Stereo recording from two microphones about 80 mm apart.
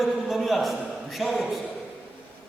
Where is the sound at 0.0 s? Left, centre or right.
Centre.